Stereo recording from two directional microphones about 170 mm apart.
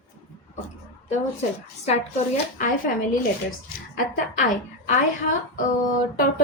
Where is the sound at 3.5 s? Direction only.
55° left (ahead or behind).